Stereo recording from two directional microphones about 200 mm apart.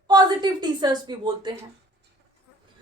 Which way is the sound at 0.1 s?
20° right (ahead or behind).